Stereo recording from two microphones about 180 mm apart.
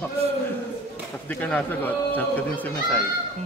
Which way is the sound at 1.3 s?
10° left (ahead or behind).